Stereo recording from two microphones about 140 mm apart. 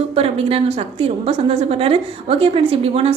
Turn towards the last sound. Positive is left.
turn(degrees=-45)  # may be behind; listen again after turning